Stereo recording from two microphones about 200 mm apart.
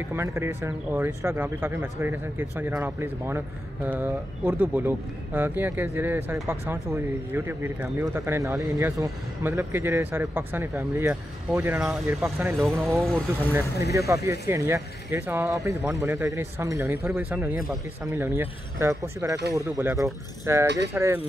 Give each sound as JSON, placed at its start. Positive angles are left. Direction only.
{"t": 0.1, "sound": "speech", "side_deg": -15}
{"t": 13.0, "sound": "speech", "side_deg": 5}
{"t": 13.5, "sound": "speech", "side_deg": -10}